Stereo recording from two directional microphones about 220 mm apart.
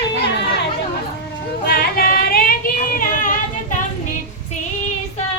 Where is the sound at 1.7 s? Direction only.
45° left (ahead or behind).